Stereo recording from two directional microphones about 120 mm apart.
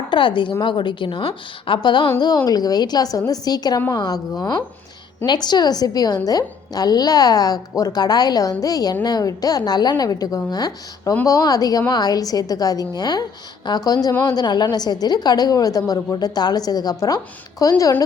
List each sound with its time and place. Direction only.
0.1 s a woman's voice: 40° left (ahead or behind)